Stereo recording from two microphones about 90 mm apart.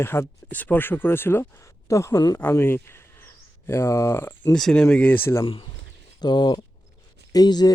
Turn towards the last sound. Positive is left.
turn(degrees=50)  # may be behind; listen again after turning